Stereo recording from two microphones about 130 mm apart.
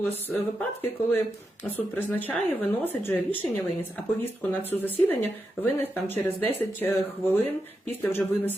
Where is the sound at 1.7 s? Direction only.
15° left (ahead or behind).